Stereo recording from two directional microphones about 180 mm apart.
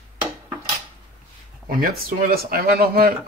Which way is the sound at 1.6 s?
55° right (ahead or behind).